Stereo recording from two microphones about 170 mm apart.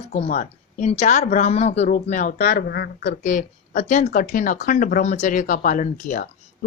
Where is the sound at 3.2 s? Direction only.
45° left (ahead or behind).